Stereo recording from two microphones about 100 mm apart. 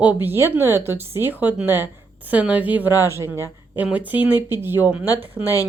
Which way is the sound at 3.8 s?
15° right (ahead or behind).